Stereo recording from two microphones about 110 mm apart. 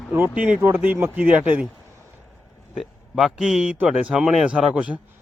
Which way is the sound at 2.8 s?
Centre (ahead or behind).